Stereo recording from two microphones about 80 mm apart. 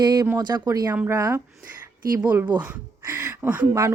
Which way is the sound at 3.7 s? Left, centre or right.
Right.